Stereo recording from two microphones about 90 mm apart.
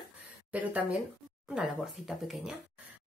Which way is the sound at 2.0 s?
5° right (ahead or behind).